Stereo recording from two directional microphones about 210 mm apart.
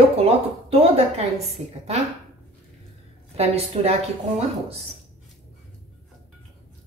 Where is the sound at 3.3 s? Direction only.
30° right (ahead or behind).